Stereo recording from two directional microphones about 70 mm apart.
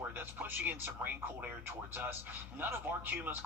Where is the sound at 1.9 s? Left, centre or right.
Right.